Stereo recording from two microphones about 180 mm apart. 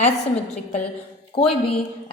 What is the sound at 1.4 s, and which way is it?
Speech, 30° left (ahead or behind).